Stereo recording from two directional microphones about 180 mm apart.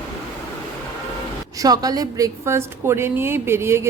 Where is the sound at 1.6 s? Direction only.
20° right (ahead or behind).